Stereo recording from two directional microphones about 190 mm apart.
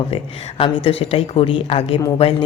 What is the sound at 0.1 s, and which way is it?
A woman's voice, 30° left (ahead or behind).